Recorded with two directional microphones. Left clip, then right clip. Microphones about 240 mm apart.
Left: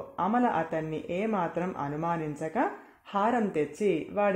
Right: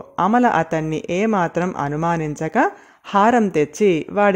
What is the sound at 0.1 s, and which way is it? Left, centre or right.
Speech, right.